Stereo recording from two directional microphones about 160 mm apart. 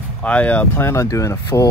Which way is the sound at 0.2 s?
10° left (ahead or behind).